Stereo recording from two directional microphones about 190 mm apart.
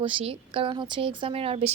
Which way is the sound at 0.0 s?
25° right (ahead or behind).